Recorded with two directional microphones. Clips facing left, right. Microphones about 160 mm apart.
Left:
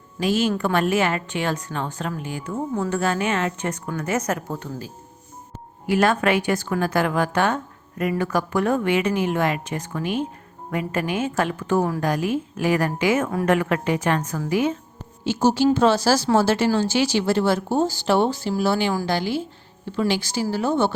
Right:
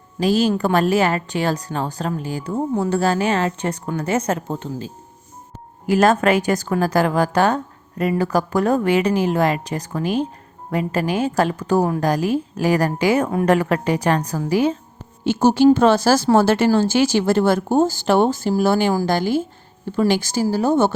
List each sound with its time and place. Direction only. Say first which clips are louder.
0.2 s a woman's voice: right 4 dB; 35° right (ahead or behind)
5.8 s a woman's voice: right 4 dB; 40° right (ahead or behind)
15.2 s speech: right 5 dB; 55° right (ahead or behind)